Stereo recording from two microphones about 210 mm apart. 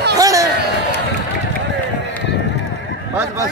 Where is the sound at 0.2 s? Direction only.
15° right (ahead or behind).